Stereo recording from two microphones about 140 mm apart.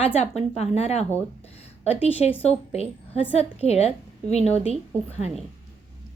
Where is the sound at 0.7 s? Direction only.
50° left (ahead or behind).